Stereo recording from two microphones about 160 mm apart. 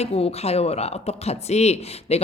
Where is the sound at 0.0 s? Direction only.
40° left (ahead or behind).